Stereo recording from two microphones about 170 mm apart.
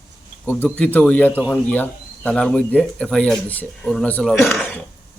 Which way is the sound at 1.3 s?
10° right (ahead or behind).